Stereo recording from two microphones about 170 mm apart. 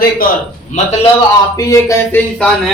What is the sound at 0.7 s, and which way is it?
Speech, 45° left (ahead or behind).